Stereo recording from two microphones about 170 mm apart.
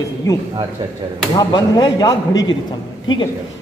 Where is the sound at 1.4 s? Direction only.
25° left (ahead or behind).